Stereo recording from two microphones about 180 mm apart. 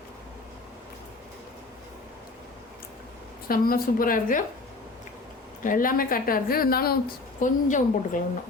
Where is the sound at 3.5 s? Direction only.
55° left (ahead or behind).